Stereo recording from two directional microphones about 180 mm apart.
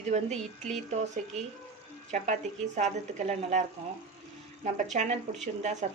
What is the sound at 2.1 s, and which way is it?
Speech, 40° right (ahead or behind).